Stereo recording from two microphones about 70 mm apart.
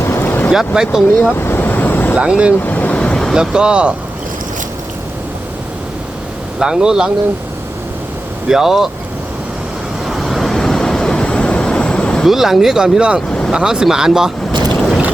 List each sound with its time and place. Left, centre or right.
0.0 s boat: left
0.5 s speech: centre
1.3 s vehicle: left
2.1 s speech: centre
2.6 s vehicle: left
3.3 s speech: centre
6.6 s speech: centre
8.4 s speech: centre
10.1 s vehicle: centre
12.2 s speech: centre
14.8 s boat: centre